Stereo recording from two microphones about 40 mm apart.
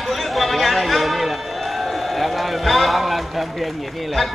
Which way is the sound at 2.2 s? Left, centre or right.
Centre.